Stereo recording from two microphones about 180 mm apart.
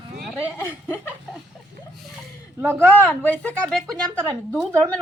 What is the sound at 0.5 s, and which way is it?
Speech, 10° left (ahead or behind).